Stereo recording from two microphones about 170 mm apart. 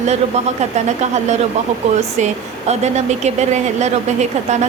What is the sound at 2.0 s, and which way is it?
A woman's voice, 40° right (ahead or behind).